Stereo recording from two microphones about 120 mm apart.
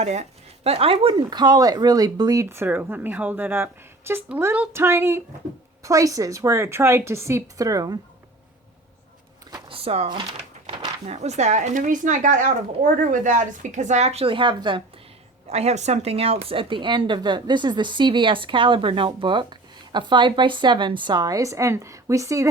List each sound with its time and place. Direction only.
0.0 s speech: 70° right (ahead or behind); by 1.1 s 50° right (ahead or behind)
1.3 s speech: 35° right (ahead or behind)
9.6 s speech: 50° right (ahead or behind)
11.0 s speech: 65° right (ahead or behind); by 14.8 s 45° right (ahead or behind)
15.4 s speech: 65° right (ahead or behind); by 22.4 s 25° right (ahead or behind)